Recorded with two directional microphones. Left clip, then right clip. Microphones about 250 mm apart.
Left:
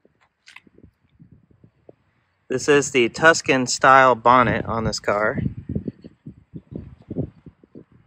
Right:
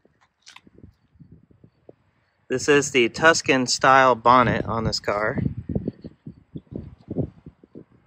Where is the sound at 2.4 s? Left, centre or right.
Centre.